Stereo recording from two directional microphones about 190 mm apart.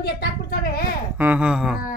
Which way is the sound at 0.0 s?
55° left (ahead or behind).